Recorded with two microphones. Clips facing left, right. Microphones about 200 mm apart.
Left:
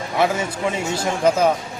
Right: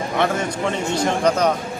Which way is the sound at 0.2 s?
5° left (ahead or behind).